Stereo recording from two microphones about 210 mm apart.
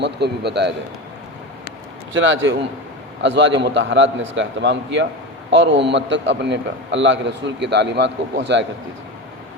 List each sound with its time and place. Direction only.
0.0 s a man's voice: 55° right (ahead or behind)
2.1 s a man's voice: 65° right (ahead or behind)